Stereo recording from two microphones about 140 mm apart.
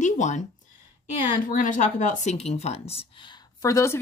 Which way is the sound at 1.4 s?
70° left (ahead or behind).